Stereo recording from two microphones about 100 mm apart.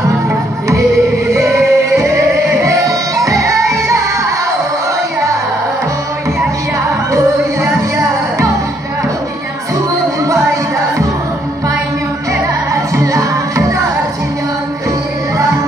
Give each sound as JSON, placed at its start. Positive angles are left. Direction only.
{"t": 1.3, "sound": "music", "side_deg": -30}
{"t": 12.7, "sound": "music", "side_deg": -30}